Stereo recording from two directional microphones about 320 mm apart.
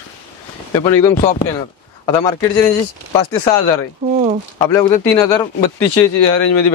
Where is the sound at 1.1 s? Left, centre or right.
Left.